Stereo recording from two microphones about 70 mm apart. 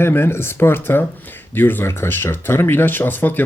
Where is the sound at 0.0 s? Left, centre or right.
Left.